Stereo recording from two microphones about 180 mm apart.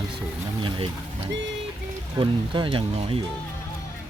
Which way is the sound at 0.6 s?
30° right (ahead or behind).